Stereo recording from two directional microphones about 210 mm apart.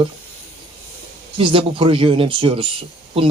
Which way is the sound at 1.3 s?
25° right (ahead or behind).